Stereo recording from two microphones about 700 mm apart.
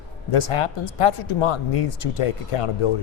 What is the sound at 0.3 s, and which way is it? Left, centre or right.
Speech, left.